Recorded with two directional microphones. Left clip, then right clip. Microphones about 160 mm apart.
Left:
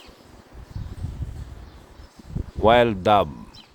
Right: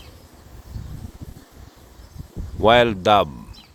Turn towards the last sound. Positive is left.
turn(degrees=0)  # may be behind; listen again after turning